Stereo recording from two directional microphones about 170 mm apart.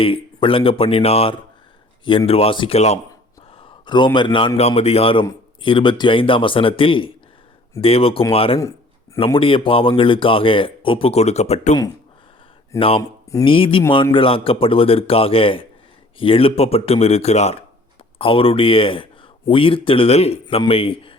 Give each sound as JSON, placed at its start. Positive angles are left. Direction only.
{"t": 0.0, "sound": "a man's voice", "side_deg": 30}
{"t": 13.0, "sound": "speech", "side_deg": 20}
{"t": 13.4, "sound": "speech", "side_deg": 30}